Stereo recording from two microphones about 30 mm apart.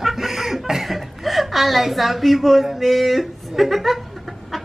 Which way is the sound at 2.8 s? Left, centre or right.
Centre.